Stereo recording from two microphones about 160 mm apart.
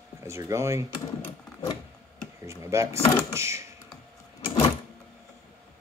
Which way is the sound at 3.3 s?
15° right (ahead or behind).